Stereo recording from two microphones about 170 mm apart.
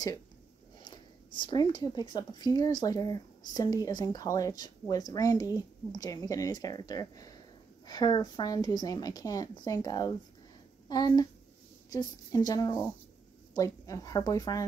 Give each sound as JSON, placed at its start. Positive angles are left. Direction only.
{"t": 0.8, "sound": "speech", "side_deg": 25}